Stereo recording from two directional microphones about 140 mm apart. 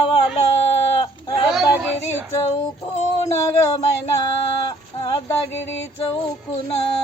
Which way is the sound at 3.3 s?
20° left (ahead or behind).